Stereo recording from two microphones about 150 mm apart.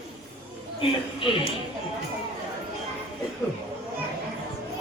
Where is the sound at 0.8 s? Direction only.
35° left (ahead or behind).